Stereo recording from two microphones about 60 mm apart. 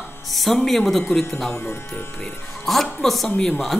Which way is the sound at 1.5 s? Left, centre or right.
Left.